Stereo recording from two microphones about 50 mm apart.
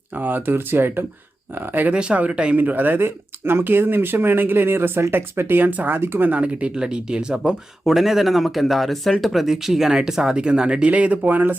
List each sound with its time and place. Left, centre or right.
0.1 s speech: right
1.9 s speech: right
2.6 s speech: right
6.3 s speech: right